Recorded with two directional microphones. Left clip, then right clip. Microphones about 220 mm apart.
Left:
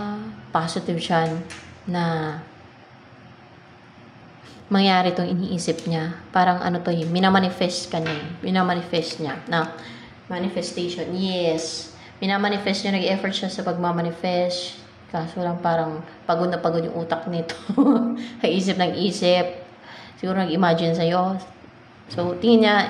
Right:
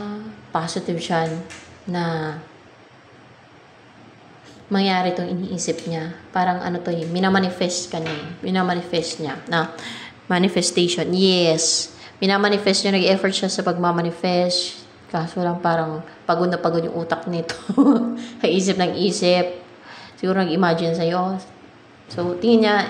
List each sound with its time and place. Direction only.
0.0 s a sound: centre (ahead or behind)
1.9 s a woman's voice: centre (ahead or behind)
4.6 s a woman's voice: 5° left (ahead or behind)
9.8 s a woman's voice: 25° right (ahead or behind)
10.2 s a woman's voice: 35° right (ahead or behind); by 22.8 s 5° right (ahead or behind)